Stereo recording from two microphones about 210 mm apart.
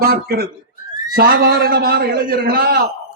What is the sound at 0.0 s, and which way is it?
A man's voice, 45° right (ahead or behind).